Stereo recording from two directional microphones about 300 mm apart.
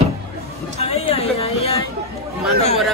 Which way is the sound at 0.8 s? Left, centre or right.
Left.